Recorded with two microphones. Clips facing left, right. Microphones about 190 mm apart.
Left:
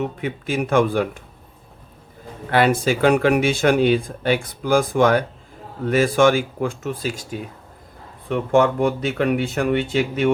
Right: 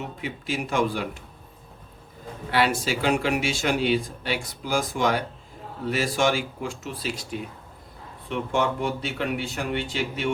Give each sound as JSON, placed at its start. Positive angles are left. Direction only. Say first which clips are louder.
{"t": 0.0, "sound": "speech", "louder": "left 8 dB", "side_deg": 55}
{"t": 2.5, "sound": "speech", "louder": "left 6 dB", "side_deg": 50}
{"t": 8.3, "sound": "speech", "louder": "left 8 dB", "side_deg": 50}